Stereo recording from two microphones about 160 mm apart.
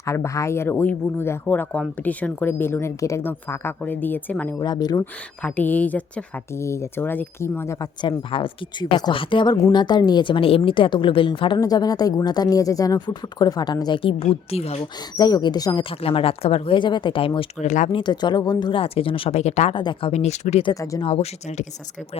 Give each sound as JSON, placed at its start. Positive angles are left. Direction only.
{"t": 0.0, "sound": "speech", "side_deg": 20}
{"t": 4.6, "sound": "speech", "side_deg": 25}
{"t": 5.4, "sound": "speech", "side_deg": 10}
{"t": 8.0, "sound": "speech", "side_deg": 30}
{"t": 15.1, "sound": "speech", "side_deg": 25}
{"t": 17.7, "sound": "speech", "side_deg": 50}
{"t": 17.9, "sound": "speech", "side_deg": 25}
{"t": 19.7, "sound": "speech", "side_deg": 30}
{"t": 20.7, "sound": "speech", "side_deg": 20}
{"t": 21.0, "sound": "speech", "side_deg": 40}